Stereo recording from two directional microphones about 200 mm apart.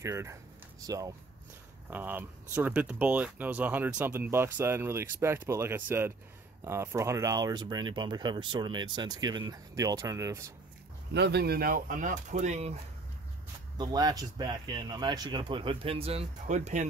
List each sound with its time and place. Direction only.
0.0 s speech: 15° right (ahead or behind)
11.1 s speech: 55° right (ahead or behind); by 12.7 s 35° right (ahead or behind)
13.7 s speech: 20° right (ahead or behind); by 16.8 s 35° right (ahead or behind)